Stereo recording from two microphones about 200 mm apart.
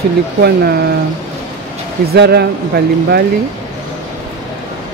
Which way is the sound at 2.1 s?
55° right (ahead or behind).